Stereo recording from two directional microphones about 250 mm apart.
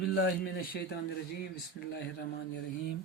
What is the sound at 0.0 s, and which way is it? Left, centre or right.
Speech, left.